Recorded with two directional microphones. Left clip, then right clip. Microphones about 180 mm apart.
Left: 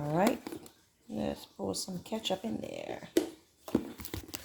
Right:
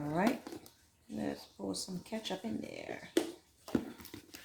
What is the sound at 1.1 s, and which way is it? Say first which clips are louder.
Speech: left 4 dB; 55° left (ahead or behind).